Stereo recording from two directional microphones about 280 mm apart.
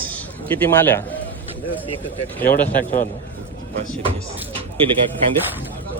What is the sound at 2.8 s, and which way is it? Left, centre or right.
Speech, left.